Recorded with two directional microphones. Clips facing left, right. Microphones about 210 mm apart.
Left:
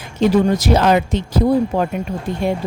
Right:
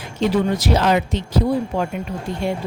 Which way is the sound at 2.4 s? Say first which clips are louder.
Left 4 dB; 50° left (ahead or behind).